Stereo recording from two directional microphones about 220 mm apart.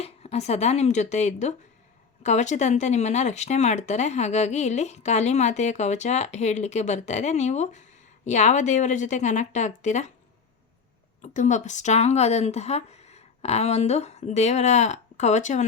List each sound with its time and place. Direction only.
0.0 s a woman's voice: 30° left (ahead or behind)
11.2 s speech: 35° left (ahead or behind)